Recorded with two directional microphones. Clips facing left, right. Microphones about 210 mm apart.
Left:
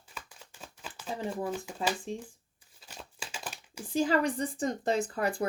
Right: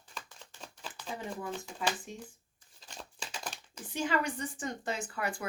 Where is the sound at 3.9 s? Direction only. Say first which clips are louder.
Left 5 dB; 35° left (ahead or behind).